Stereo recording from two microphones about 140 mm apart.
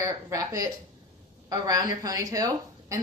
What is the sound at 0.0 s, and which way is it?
A woman's voice, 25° right (ahead or behind).